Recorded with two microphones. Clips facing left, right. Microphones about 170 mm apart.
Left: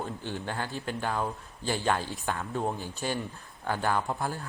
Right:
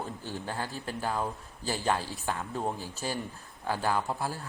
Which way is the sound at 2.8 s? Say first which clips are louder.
Left 2 dB; 35° right (ahead or behind).